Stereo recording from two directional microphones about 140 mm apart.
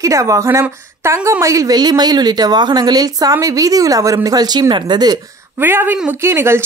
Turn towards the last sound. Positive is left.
turn(degrees=-15)  # may be behind; listen again after turning